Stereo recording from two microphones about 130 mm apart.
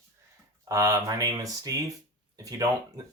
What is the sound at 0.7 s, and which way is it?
Speech, 25° right (ahead or behind).